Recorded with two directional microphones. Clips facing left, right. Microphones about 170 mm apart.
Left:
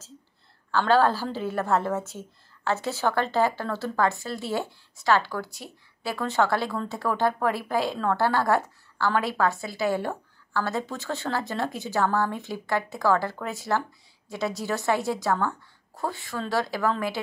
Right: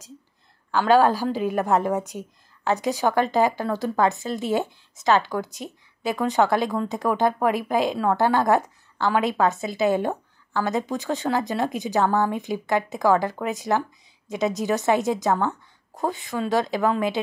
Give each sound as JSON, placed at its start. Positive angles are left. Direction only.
{"t": 0.7, "sound": "a woman's voice", "side_deg": -15}